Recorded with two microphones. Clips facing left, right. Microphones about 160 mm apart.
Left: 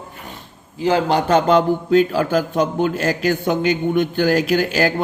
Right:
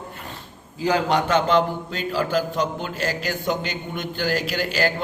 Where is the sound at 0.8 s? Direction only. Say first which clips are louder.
Left 4 dB; 25° left (ahead or behind).